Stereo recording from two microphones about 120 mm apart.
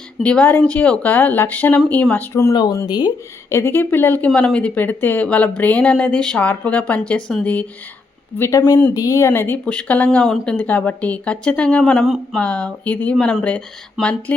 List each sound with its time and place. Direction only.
0.2 s speech: 10° left (ahead or behind)
2.6 s speech: 35° left (ahead or behind)
3.5 s speech: 20° left (ahead or behind)